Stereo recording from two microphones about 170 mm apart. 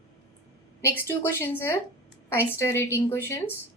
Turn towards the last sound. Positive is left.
turn(degrees=15)  # may be behind; listen again after turning